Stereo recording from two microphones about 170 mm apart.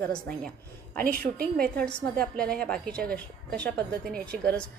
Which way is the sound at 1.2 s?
60° right (ahead or behind).